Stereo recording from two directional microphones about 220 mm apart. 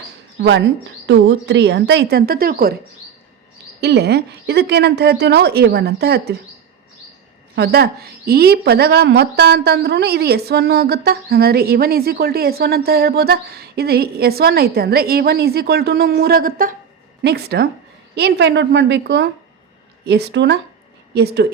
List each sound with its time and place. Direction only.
0.3 s a woman's voice: 55° right (ahead or behind)
3.8 s a woman's voice: 50° right (ahead or behind)
7.5 s a woman's voice: 45° right (ahead or behind)